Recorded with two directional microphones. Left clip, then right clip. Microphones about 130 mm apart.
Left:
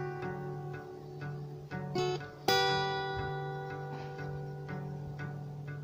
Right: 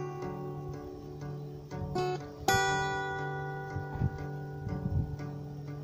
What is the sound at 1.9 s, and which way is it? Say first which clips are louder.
Music: right 1 dB; 30° left (ahead or behind).